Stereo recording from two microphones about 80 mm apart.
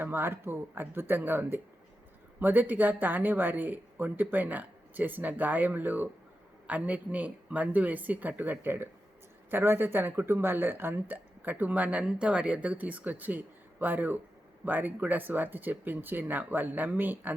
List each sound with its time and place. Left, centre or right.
0.0 s speech: right